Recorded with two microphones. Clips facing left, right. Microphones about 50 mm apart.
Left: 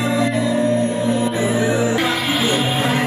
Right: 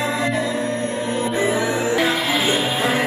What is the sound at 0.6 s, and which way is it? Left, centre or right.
Music, right.